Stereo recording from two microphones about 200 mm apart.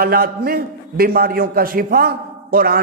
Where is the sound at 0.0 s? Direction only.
50° right (ahead or behind).